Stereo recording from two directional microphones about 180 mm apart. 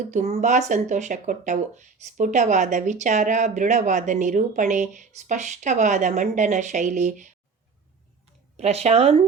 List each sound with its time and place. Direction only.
0.1 s speech: 40° right (ahead or behind)
8.5 s a woman's voice: 35° right (ahead or behind)